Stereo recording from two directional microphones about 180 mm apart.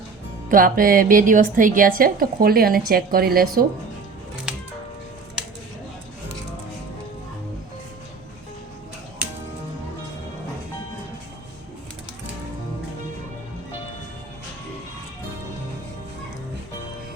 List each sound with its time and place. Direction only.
0.4 s music: 50° right (ahead or behind)
1.5 s a woman's voice: 45° right (ahead or behind)
4.5 s music: 5° right (ahead or behind)